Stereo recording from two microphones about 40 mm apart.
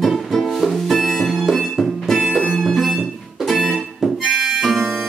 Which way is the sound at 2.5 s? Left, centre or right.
Centre.